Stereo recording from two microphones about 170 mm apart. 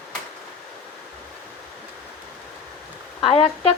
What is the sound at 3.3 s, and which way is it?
Speech, 35° left (ahead or behind).